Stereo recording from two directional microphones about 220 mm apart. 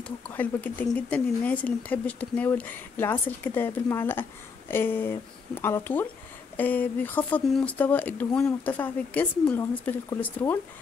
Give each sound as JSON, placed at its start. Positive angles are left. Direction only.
{"t": 0.3, "sound": "speech", "side_deg": 10}